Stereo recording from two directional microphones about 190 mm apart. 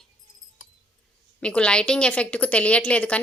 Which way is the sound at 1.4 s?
5° left (ahead or behind).